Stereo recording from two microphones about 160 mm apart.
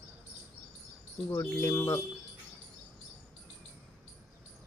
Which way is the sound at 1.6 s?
20° left (ahead or behind).